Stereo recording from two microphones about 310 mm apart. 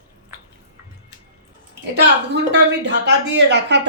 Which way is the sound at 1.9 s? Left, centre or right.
Right.